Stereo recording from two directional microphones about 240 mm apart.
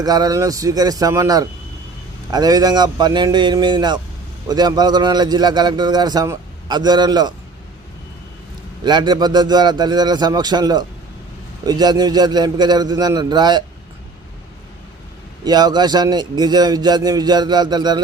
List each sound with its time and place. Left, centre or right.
0.0 s a man's voice: centre
8.8 s a man's voice: centre
15.4 s a man's voice: centre